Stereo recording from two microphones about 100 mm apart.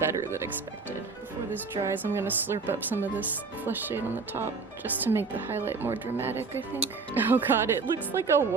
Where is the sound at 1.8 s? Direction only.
25° right (ahead or behind).